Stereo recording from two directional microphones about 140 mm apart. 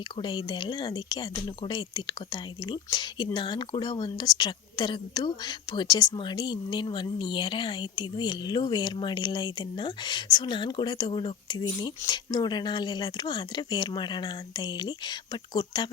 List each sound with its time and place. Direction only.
0.2 s speech: 30° left (ahead or behind)